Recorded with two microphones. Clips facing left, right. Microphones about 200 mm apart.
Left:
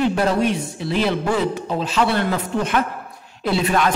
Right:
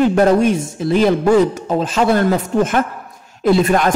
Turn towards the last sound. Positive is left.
turn(degrees=-45)  # may be behind; listen again after turning